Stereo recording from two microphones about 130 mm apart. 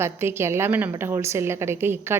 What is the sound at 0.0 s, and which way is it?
A woman's voice, 20° right (ahead or behind).